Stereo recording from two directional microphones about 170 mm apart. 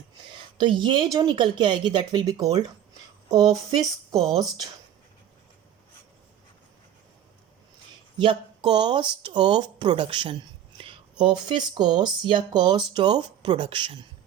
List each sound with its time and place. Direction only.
0.6 s speech: 30° right (ahead or behind)
8.2 s speech: 30° right (ahead or behind)